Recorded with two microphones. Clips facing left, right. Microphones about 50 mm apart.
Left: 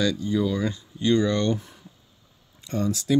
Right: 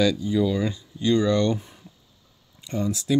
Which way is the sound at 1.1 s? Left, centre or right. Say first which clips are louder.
Right 1 dB; left.